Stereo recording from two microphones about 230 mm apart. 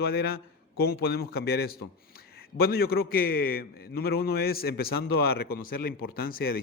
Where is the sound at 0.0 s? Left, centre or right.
Left.